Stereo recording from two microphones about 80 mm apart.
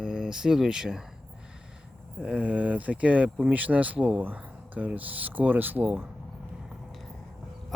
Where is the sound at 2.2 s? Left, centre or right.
Centre.